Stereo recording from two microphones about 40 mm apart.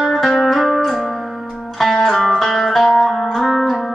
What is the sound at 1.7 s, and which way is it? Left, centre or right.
Music, centre.